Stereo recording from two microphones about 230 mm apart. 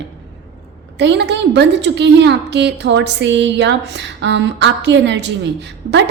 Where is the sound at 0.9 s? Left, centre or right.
Right.